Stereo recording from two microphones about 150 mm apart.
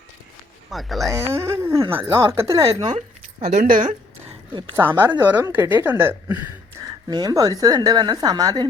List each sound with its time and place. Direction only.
0.7 s speech: centre (ahead or behind)
1.1 s speech: 20° right (ahead or behind)
3.6 s speech: 65° right (ahead or behind)
4.7 s speech: 15° right (ahead or behind)
7.1 s a woman's voice: 25° right (ahead or behind)